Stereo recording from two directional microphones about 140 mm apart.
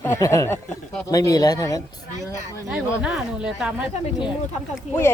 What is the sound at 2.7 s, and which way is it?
Speech, 5° right (ahead or behind).